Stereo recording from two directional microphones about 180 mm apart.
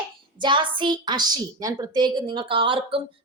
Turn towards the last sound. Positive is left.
turn(degrees=-30)  # may be behind; listen again after turning